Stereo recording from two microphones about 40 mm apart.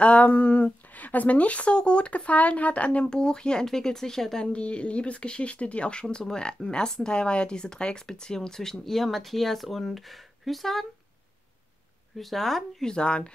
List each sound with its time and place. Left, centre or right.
0.0 s speech: left
3.1 s speech: centre
4.4 s speech: left; by 10.9 s centre
12.2 s speech: centre
12.8 s speech: left